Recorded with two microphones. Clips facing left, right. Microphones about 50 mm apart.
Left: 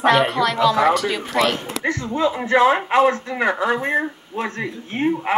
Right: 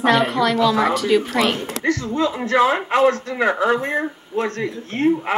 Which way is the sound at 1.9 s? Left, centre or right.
Centre.